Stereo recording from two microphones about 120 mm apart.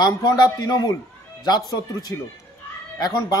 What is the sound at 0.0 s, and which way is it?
A man's voice, 35° left (ahead or behind).